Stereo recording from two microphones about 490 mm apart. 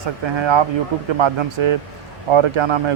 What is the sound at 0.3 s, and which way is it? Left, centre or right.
A man's voice, right.